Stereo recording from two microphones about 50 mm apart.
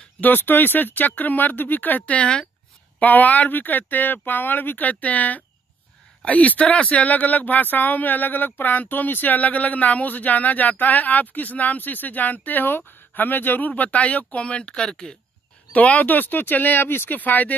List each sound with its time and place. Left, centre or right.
0.2 s speech: left
3.0 s speech: left; by 15.1 s centre
15.7 s speech: left